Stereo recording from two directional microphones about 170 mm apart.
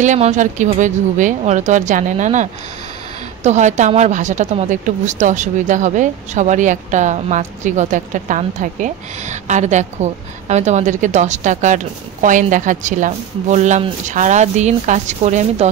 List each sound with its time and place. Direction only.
0.0 s a woman's voice: 45° right (ahead or behind)